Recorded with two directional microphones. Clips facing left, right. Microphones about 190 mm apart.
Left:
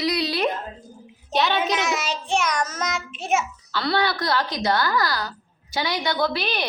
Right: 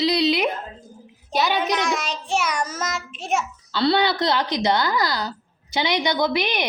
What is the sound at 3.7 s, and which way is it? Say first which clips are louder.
A woman's voice: right 4 dB; 25° right (ahead or behind).